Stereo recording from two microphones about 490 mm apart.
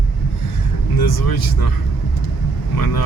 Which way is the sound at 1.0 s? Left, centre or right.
Left.